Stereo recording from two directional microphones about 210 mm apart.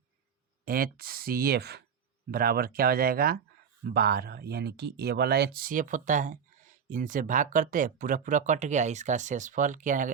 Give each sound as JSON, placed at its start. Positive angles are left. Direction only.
{"t": 0.6, "sound": "speech", "side_deg": -45}